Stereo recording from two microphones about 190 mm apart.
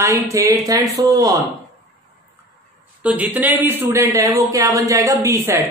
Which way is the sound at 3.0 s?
10° right (ahead or behind).